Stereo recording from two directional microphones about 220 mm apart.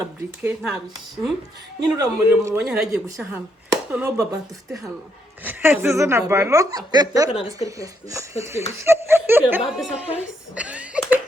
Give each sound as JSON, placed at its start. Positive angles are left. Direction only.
{"t": 0.0, "sound": "speech", "side_deg": -10}
{"t": 1.8, "sound": "speech", "side_deg": -15}
{"t": 2.6, "sound": "speech", "side_deg": -5}
{"t": 10.5, "sound": "a sound", "side_deg": -5}